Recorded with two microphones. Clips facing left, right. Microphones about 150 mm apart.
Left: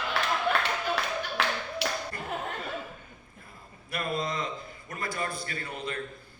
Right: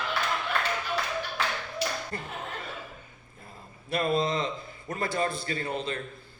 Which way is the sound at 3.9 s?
30° right (ahead or behind).